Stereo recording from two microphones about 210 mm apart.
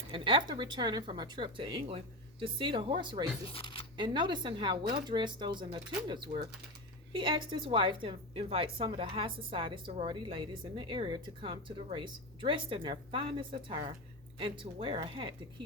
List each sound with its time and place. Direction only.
0.1 s a woman's voice: 25° right (ahead or behind)
3.4 s speech: 25° left (ahead or behind)
3.9 s a woman's voice: 20° right (ahead or behind)